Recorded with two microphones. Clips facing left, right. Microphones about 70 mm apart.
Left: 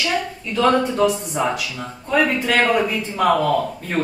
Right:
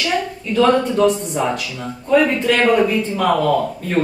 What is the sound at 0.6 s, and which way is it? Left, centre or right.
Speech, centre.